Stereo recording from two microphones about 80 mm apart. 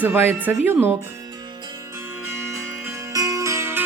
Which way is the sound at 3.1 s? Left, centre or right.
Right.